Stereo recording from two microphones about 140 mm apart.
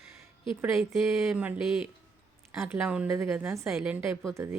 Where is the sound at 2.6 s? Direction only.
10° right (ahead or behind).